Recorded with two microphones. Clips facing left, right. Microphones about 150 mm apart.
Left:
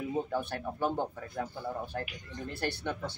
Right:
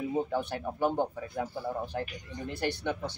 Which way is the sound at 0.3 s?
15° right (ahead or behind).